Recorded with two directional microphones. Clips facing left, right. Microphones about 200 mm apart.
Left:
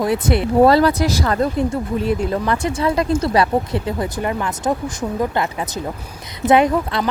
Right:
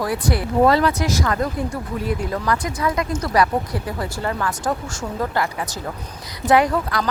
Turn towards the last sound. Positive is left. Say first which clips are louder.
# left 2 dB
turn(degrees=20)  # may be behind; listen again after turning